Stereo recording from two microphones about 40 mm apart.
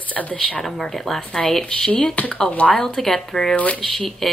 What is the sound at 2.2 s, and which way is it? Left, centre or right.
Speech, left.